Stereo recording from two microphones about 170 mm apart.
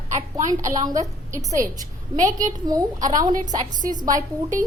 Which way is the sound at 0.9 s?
20° right (ahead or behind).